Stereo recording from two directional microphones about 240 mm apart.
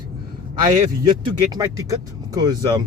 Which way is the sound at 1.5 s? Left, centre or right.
Centre.